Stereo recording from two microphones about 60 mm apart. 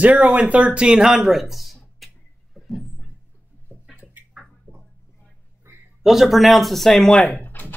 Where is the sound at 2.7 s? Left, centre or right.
Centre.